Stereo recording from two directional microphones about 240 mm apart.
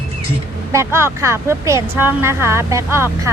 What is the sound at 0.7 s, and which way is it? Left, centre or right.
Speech, centre.